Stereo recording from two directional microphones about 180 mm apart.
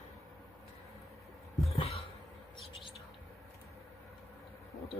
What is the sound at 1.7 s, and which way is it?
Cough, 35° left (ahead or behind).